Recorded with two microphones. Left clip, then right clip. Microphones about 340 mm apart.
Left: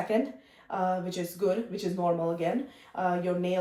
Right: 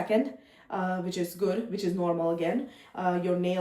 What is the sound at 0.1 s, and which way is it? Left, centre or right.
Speech, centre.